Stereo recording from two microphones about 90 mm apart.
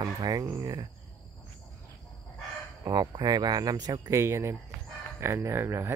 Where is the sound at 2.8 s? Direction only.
45° right (ahead or behind).